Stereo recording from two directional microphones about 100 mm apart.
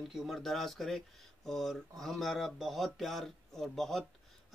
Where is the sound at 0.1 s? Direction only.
Centre (ahead or behind).